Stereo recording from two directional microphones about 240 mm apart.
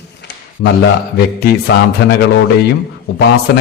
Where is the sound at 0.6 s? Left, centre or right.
Left.